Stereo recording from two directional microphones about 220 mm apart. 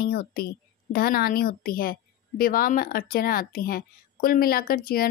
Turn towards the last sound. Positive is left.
turn(degrees=40)  # may be behind; listen again after turning